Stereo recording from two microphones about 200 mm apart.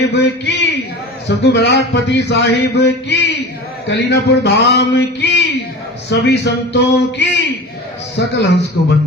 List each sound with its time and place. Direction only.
0.1 s speech: 60° left (ahead or behind)